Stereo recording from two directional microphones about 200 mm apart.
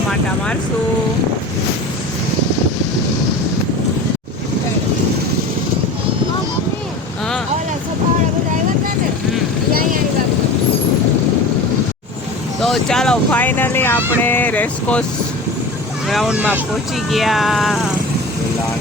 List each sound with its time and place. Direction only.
12.5 s speech: centre (ahead or behind)
16.0 s speech: centre (ahead or behind)